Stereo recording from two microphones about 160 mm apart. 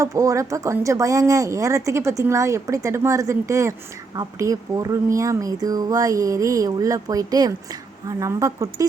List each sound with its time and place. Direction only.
0.0 s speech: 20° right (ahead or behind)